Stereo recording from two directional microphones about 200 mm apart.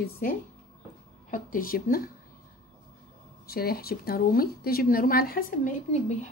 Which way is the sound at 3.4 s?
50° left (ahead or behind).